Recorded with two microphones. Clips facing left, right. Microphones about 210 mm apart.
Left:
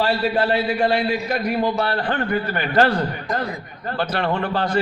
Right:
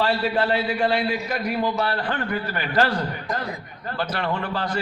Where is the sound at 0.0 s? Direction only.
40° left (ahead or behind).